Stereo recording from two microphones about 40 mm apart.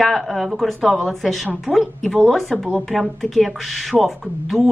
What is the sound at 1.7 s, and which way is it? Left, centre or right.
Speech, right.